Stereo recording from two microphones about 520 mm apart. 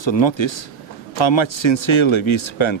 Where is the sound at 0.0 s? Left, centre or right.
Left.